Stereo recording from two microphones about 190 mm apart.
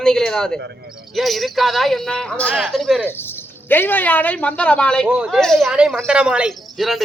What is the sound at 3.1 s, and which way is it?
Speech, 10° left (ahead or behind).